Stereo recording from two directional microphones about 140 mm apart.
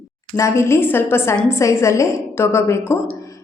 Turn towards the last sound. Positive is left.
turn(degrees=20)  # may be behind; listen again after turning